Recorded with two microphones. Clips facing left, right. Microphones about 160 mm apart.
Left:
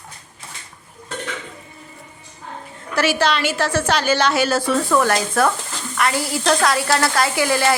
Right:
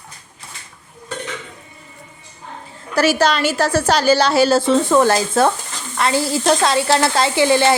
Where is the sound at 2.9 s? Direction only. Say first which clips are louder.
Right 3 dB; 40° right (ahead or behind).